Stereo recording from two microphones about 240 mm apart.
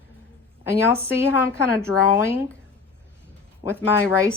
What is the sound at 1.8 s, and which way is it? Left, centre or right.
Speech, centre.